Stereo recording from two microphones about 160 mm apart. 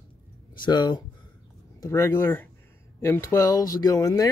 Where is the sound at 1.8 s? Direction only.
15° left (ahead or behind).